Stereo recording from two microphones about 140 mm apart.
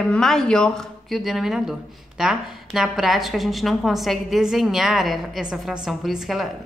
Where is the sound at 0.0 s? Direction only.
5° left (ahead or behind).